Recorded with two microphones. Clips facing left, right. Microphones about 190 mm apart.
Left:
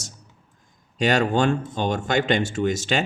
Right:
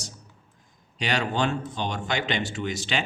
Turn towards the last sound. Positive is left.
turn(degrees=45)  # may be behind; listen again after turning